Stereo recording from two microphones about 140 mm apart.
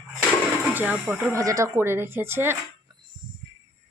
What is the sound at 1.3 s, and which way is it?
Speech, 25° right (ahead or behind).